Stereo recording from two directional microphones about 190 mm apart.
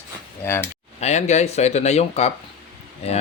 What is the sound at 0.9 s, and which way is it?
Speech, 35° left (ahead or behind).